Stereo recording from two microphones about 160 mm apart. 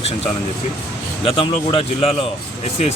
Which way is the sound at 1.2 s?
35° left (ahead or behind).